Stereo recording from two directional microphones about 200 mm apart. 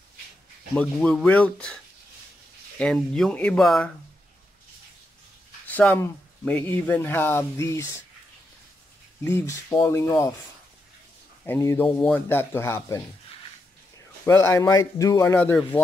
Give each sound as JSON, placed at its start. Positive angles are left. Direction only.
{"t": 0.7, "sound": "speech", "side_deg": 5}
{"t": 2.8, "sound": "speech", "side_deg": 5}
{"t": 5.7, "sound": "speech", "side_deg": 10}
{"t": 9.2, "sound": "speech", "side_deg": 10}
{"t": 11.4, "sound": "speech", "side_deg": 10}
{"t": 14.2, "sound": "speech", "side_deg": 15}